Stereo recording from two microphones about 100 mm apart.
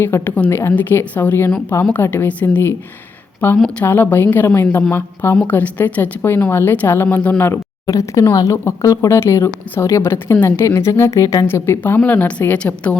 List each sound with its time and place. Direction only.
0.0 s a woman's voice: 20° left (ahead or behind)
7.9 s speech: 35° left (ahead or behind); by 13.0 s 15° left (ahead or behind)